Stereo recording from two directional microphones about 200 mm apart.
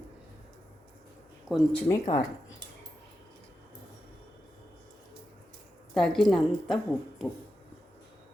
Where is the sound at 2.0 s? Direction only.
35° left (ahead or behind).